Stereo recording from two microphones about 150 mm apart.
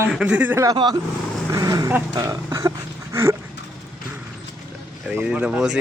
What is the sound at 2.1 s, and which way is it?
Speech, 20° right (ahead or behind).